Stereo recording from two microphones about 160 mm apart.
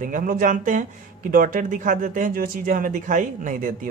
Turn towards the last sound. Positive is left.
turn(degrees=-55)  # may be behind; listen again after turning